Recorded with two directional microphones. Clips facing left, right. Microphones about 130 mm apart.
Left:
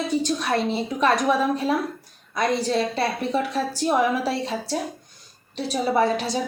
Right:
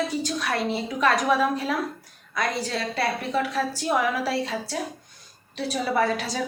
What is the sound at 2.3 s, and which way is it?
A woman's voice, 25° left (ahead or behind).